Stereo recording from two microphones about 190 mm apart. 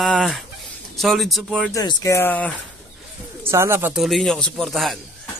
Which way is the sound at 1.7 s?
15° left (ahead or behind).